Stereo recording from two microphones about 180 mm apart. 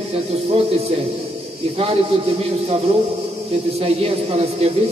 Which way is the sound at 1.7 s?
35° right (ahead or behind).